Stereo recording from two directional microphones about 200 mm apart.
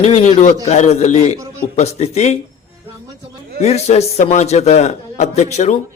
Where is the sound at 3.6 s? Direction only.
30° left (ahead or behind).